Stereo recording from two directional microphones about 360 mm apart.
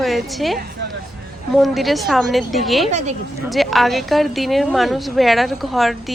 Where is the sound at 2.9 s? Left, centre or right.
Centre.